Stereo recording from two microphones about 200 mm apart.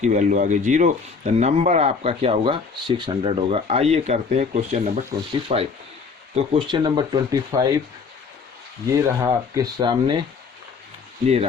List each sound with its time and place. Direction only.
0.0 s speech: 40° right (ahead or behind); by 7.8 s 15° right (ahead or behind)
8.9 s speech: 15° right (ahead or behind)